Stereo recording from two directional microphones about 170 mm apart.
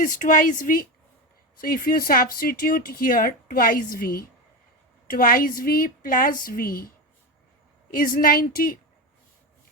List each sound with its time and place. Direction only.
0.0 s a woman's voice: 50° left (ahead or behind)
7.9 s speech: 55° left (ahead or behind)